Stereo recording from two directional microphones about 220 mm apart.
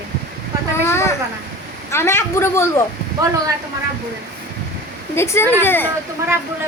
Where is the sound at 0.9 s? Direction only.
10° left (ahead or behind).